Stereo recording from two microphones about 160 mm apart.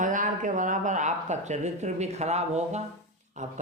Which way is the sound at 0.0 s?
55° right (ahead or behind).